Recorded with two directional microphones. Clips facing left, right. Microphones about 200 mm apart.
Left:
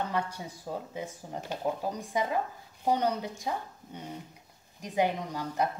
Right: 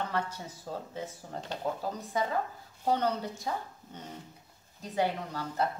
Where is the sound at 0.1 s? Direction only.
15° left (ahead or behind).